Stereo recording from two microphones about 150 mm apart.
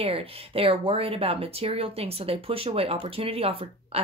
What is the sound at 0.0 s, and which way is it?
Speech, 40° right (ahead or behind).